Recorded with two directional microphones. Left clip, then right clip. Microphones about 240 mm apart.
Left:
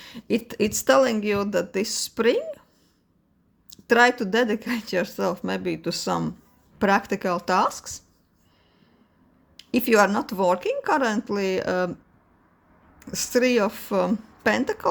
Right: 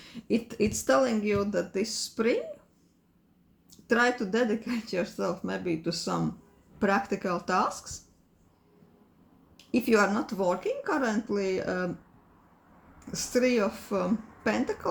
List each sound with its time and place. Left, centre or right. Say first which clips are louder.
0.0 s speech: left 4 dB; left
3.7 s speech: left 7 dB; left
9.7 s speech: left 5 dB; left
13.0 s speech: left 5 dB; left